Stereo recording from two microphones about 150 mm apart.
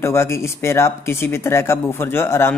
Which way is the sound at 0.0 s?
15° left (ahead or behind).